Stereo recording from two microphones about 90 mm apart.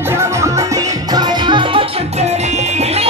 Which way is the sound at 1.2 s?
65° right (ahead or behind).